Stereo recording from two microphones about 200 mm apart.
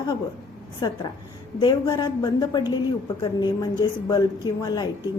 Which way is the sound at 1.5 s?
20° left (ahead or behind).